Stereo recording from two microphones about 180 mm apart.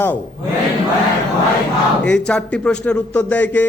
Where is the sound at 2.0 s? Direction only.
5° left (ahead or behind).